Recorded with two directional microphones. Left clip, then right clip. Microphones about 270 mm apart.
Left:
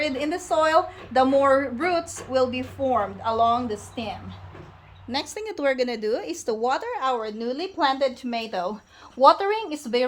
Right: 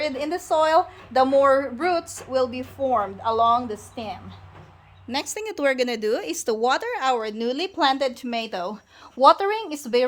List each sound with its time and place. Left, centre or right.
0.0 s a woman's voice: centre